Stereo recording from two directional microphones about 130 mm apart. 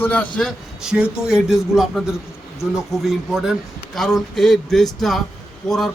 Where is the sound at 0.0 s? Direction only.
10° left (ahead or behind).